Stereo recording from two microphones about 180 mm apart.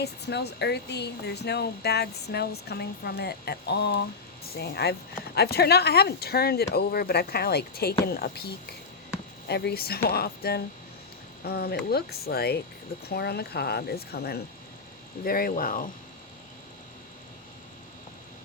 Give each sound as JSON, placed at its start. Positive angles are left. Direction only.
{"t": 0.0, "sound": "speech", "side_deg": 65}